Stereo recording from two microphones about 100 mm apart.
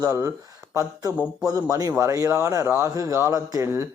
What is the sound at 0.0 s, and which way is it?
Speech, 35° right (ahead or behind).